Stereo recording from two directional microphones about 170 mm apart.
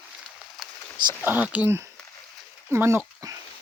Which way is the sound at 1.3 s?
10° right (ahead or behind).